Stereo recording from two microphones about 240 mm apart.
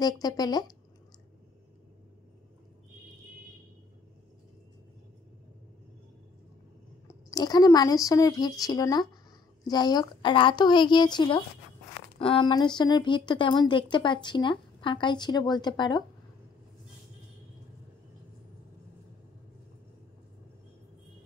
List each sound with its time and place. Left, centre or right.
0.0 s speech: centre
7.1 s speech: centre